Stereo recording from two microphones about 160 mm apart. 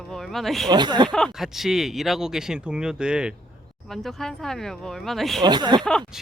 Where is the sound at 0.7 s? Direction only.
25° right (ahead or behind).